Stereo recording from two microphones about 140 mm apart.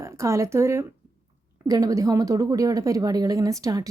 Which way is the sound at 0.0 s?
20° right (ahead or behind).